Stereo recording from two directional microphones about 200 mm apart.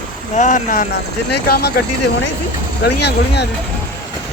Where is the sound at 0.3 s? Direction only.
40° left (ahead or behind).